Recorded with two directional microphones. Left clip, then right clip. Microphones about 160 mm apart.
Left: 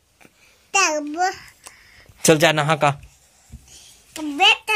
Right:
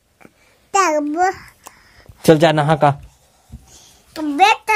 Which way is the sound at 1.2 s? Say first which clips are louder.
Right 5 dB; 40° right (ahead or behind).